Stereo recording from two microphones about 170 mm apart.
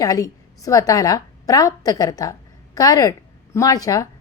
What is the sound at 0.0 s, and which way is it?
A woman's voice, 20° left (ahead or behind).